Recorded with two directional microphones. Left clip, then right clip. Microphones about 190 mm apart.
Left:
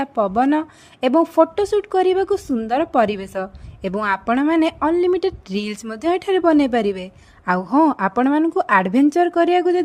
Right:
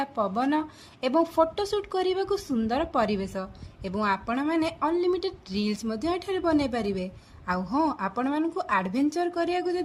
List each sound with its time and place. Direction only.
0.0 s speech: 45° left (ahead or behind)